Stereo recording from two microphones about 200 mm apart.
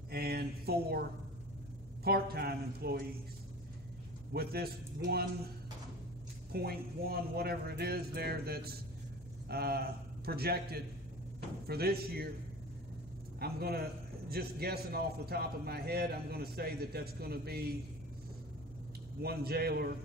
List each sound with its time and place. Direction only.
0.1 s a sound: 50° right (ahead or behind)
2.0 s a man's voice: 50° right (ahead or behind)
4.3 s a man's voice: 50° right (ahead or behind)
6.5 s a man's voice: 50° right (ahead or behind)
13.4 s a man's voice: 50° right (ahead or behind)
19.2 s a man's voice: 50° right (ahead or behind)